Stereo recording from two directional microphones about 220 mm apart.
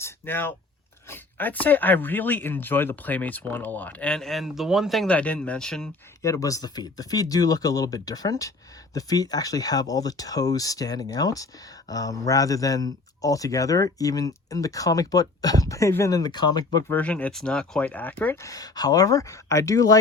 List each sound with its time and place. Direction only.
0.0 s a sound: 10° left (ahead or behind)
1.1 s a man's voice: 10° left (ahead or behind)
6.2 s a man's voice: 15° left (ahead or behind)